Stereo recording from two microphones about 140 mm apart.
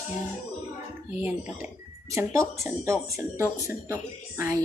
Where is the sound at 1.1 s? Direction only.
15° right (ahead or behind).